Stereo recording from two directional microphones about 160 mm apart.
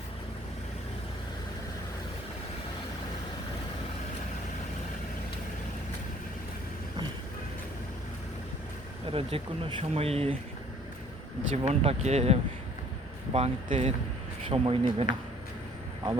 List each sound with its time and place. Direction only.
9.1 s speech: 35° right (ahead or behind)
11.5 s speech: 40° right (ahead or behind)